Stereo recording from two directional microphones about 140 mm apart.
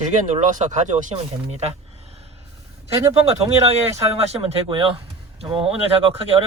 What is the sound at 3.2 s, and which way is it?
Speech, 50° right (ahead or behind).